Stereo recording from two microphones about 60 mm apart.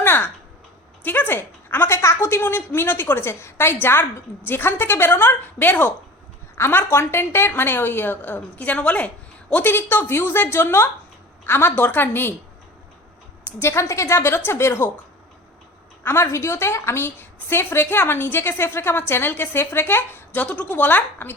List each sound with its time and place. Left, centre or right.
0.0 s a sound: left
1.0 s a woman's voice: left
2.0 s a woman's voice: left
13.6 s a woman's voice: left
16.0 s a woman's voice: left